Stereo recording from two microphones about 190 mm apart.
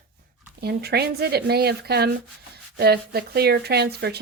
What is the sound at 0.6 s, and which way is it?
Speech, 55° right (ahead or behind).